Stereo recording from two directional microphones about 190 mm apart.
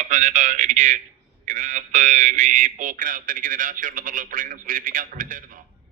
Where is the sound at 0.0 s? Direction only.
40° right (ahead or behind).